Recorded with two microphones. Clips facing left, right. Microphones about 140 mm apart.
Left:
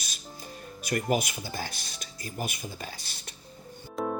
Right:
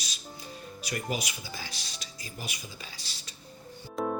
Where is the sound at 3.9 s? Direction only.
Centre (ahead or behind).